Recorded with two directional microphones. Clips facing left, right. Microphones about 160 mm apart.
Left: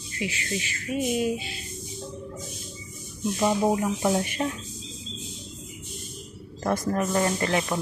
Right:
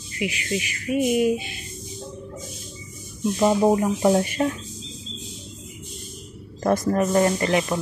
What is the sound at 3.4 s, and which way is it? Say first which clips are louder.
Speech: right 5 dB; 40° right (ahead or behind).